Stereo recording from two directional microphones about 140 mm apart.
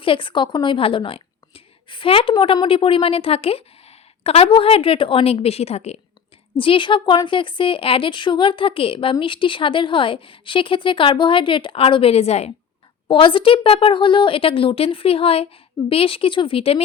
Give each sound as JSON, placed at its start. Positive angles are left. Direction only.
{"t": 0.0, "sound": "speech", "side_deg": 40}